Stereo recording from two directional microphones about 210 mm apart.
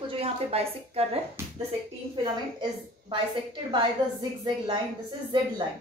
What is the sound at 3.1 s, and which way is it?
Speech, 20° right (ahead or behind).